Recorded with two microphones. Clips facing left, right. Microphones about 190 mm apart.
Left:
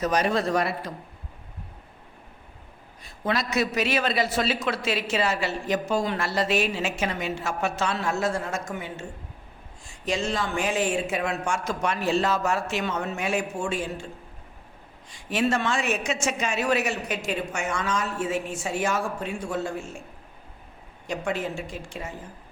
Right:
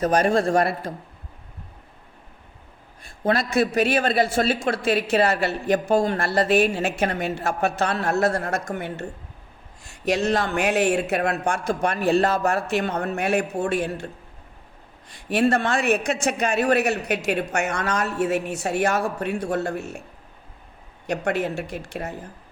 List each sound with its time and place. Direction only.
0.0 s speech: 50° right (ahead or behind)
3.0 s a man's voice: 50° right (ahead or behind)
15.1 s speech: 60° right (ahead or behind)
21.1 s speech: 65° right (ahead or behind)